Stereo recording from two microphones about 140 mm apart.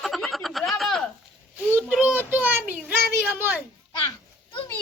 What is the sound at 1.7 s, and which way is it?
A child's voice, 10° right (ahead or behind).